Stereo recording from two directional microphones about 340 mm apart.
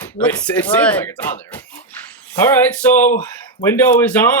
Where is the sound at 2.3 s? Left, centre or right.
Centre.